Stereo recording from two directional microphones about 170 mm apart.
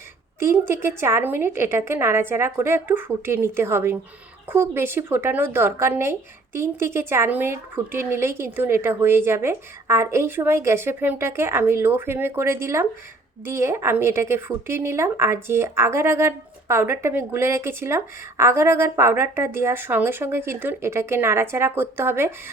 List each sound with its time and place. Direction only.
0.3 s speech: 15° right (ahead or behind)